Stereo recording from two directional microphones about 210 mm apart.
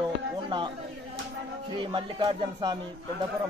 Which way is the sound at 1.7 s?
20° right (ahead or behind).